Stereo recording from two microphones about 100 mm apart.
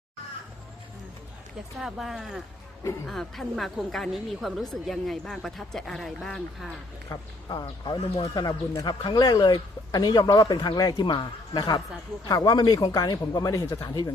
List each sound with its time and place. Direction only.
1.8 s speech: centre (ahead or behind)
7.1 s speech: 45° left (ahead or behind)